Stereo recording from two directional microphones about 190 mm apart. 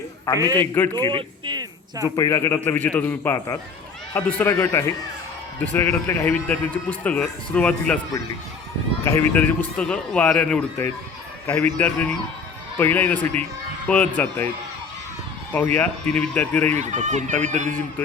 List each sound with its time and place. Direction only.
0.4 s a man's voice: 10° left (ahead or behind)
0.9 s speech: 25° right (ahead or behind)
2.1 s a man's voice: 15° left (ahead or behind)
9.0 s a man's voice: 10° left (ahead or behind)
15.5 s a man's voice: 10° left (ahead or behind)
16.7 s speech: 40° right (ahead or behind)